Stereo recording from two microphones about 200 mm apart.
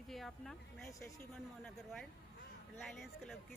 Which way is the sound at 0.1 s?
Centre (ahead or behind).